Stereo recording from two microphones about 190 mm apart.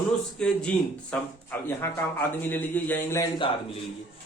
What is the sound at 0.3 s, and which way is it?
A man's voice, 5° left (ahead or behind).